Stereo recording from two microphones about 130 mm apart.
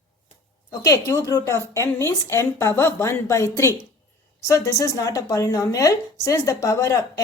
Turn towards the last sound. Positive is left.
turn(degrees=25)  # may be behind; listen again after turning